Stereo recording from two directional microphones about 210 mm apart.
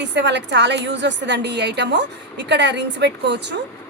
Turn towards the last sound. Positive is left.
turn(degrees=-55)  # may be behind; listen again after turning